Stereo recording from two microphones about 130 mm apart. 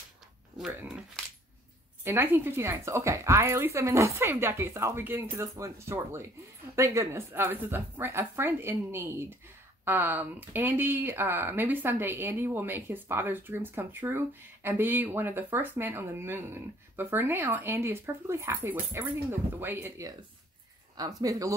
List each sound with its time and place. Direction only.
0.7 s speech: 10° right (ahead or behind)
2.0 s a woman's voice: 15° right (ahead or behind)
20.9 s a woman's voice: 30° right (ahead or behind)